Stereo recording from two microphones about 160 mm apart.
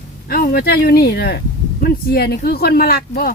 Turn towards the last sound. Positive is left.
turn(degrees=70)  # may be behind; listen again after turning